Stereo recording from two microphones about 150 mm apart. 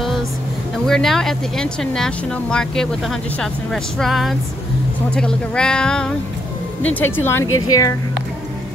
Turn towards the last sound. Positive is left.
turn(degrees=20)  # may be behind; listen again after turning